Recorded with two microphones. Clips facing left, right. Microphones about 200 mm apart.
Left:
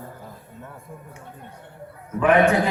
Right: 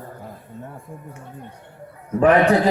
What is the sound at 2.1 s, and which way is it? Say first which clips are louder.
Speech: right 2 dB; 35° right (ahead or behind).